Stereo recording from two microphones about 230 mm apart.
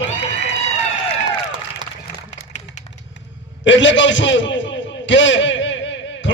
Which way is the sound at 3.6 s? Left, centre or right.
Left.